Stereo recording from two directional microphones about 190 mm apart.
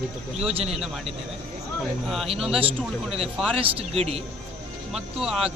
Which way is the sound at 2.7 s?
30° right (ahead or behind).